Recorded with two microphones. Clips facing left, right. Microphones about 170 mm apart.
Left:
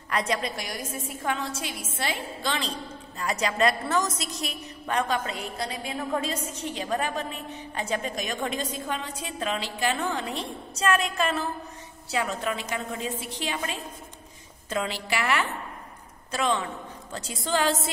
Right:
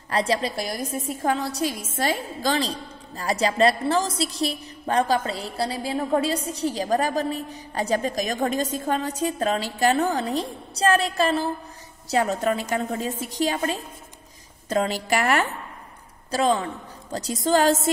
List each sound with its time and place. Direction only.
0.1 s a woman's voice: 30° right (ahead or behind)
16.3 s a woman's voice: 35° right (ahead or behind)